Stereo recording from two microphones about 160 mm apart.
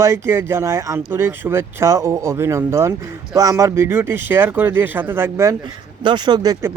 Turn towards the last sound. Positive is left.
turn(degrees=-25)  # may be behind; listen again after turning